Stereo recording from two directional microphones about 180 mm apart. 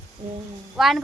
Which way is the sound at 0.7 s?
Centre (ahead or behind).